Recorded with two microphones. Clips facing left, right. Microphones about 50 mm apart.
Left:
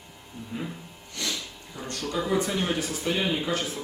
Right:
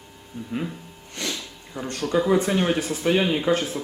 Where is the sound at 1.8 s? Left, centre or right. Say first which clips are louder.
Right 7 dB; right.